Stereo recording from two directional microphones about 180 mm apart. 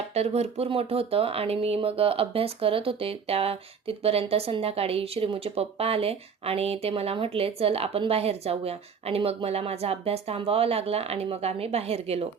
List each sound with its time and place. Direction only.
0.1 s speech: 35° right (ahead or behind)